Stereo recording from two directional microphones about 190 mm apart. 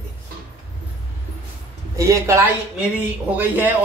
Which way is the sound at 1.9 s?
15° right (ahead or behind).